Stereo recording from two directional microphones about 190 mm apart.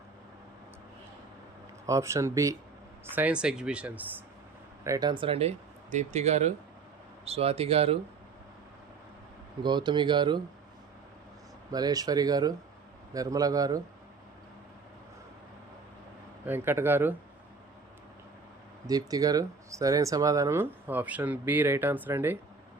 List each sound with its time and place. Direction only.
1.9 s speech: 15° right (ahead or behind)
4.8 s speech: 20° right (ahead or behind)
9.6 s speech: 25° right (ahead or behind)
11.7 s speech: 20° right (ahead or behind)
16.5 s speech: 10° right (ahead or behind)
18.9 s speech: 20° right (ahead or behind)